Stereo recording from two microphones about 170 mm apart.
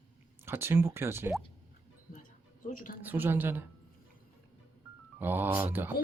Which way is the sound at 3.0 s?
10° right (ahead or behind).